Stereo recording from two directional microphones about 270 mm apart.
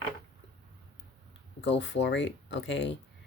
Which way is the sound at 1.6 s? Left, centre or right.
Left.